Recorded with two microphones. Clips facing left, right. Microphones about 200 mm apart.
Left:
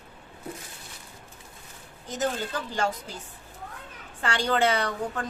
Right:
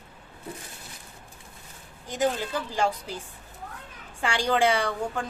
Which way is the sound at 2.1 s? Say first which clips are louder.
Right 3 dB; 10° right (ahead or behind).